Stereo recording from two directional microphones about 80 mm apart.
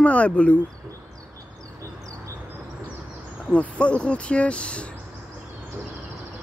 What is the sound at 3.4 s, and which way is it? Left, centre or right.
Speech, centre.